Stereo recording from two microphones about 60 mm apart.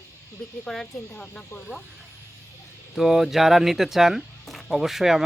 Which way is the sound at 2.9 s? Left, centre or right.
Centre.